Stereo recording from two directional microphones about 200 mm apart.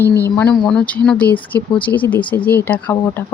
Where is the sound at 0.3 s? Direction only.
5° left (ahead or behind).